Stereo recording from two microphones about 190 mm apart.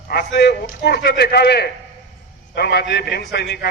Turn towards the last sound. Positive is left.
turn(degrees=55)  # may be behind; listen again after turning